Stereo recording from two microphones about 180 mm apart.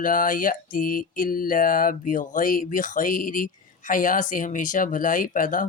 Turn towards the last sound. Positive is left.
turn(degrees=45)  # may be behind; listen again after turning